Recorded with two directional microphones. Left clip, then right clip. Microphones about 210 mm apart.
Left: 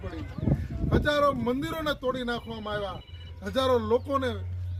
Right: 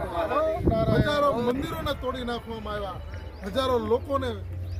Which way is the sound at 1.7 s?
25° right (ahead or behind).